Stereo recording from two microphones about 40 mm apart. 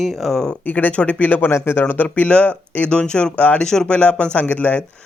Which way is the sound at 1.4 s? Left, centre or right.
Left.